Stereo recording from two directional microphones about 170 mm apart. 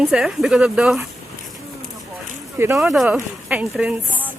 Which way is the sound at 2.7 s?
Centre (ahead or behind).